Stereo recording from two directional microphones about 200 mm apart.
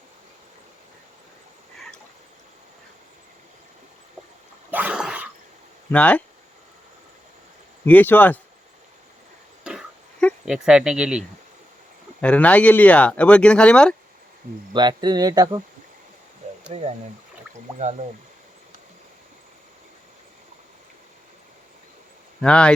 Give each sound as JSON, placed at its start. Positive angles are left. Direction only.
{"t": 4.7, "sound": "dog", "side_deg": -5}
{"t": 5.9, "sound": "speech", "side_deg": 5}
{"t": 7.9, "sound": "speech", "side_deg": 10}
{"t": 9.6, "sound": "a sound", "side_deg": 0}
{"t": 12.2, "sound": "speech", "side_deg": 5}
{"t": 14.7, "sound": "speech", "side_deg": -20}
{"t": 16.6, "sound": "speech", "side_deg": -30}
{"t": 22.4, "sound": "speech", "side_deg": 5}